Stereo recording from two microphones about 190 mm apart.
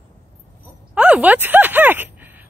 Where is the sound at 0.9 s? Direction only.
5° right (ahead or behind).